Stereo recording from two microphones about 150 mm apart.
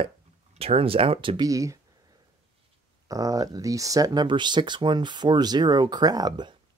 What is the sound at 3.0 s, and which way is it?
Speech, 25° right (ahead or behind).